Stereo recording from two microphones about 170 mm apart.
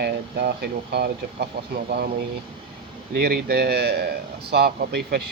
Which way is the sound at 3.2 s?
65° right (ahead or behind).